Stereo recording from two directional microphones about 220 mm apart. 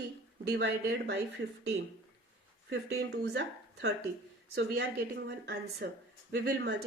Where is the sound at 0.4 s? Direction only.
55° right (ahead or behind).